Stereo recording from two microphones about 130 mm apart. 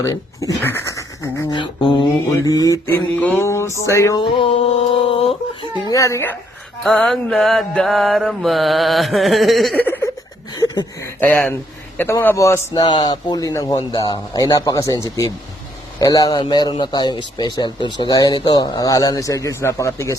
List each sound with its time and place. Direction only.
0.0 s speech: 25° left (ahead or behind)
1.5 s a man's voice: 40° left (ahead or behind)
2.3 s speech: 25° left (ahead or behind)
3.2 s a sound: 10° left (ahead or behind)
3.4 s speech: 20° left (ahead or behind)
4.2 s a sound: 40° left (ahead or behind)
5.9 s speech: 25° left (ahead or behind)
6.8 s mantra: 5° left (ahead or behind)
9.7 s a sound: 15° left (ahead or behind)
10.5 s a sound: 35° left (ahead or behind)
11.0 s speech: 10° left (ahead or behind)
11.9 s speech: 20° left (ahead or behind)
12.7 s a man's voice: 35° left (ahead or behind)